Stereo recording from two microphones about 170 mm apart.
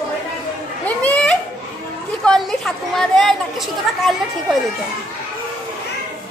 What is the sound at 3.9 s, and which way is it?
Speech, centre (ahead or behind).